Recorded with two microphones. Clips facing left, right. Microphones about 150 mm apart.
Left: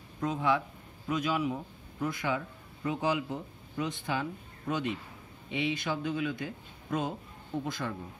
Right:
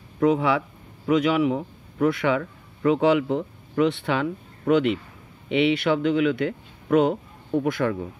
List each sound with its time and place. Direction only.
0.2 s a man's voice: 85° right